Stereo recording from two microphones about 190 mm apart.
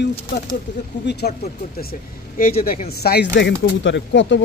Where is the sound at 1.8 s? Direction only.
50° left (ahead or behind); by 4.4 s 70° left (ahead or behind).